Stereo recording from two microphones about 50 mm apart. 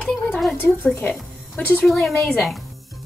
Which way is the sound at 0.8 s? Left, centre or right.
Left.